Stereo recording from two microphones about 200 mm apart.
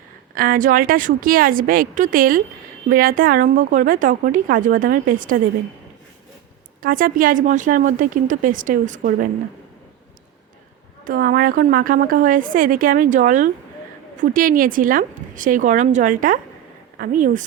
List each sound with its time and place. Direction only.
0.3 s a woman's voice: 45° right (ahead or behind)
6.8 s a woman's voice: 45° right (ahead or behind)
11.0 s a woman's voice: 45° right (ahead or behind)